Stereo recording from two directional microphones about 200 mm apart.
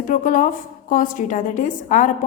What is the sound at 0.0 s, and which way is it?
A woman's voice, 40° left (ahead or behind).